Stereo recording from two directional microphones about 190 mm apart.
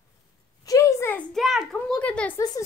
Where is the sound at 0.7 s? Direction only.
15° left (ahead or behind).